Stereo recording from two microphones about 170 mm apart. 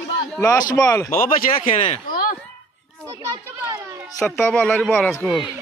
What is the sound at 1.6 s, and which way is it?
Speech, 30° left (ahead or behind).